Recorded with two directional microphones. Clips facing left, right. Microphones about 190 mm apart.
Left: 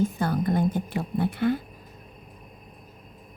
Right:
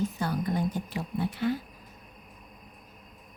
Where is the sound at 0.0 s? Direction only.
55° left (ahead or behind).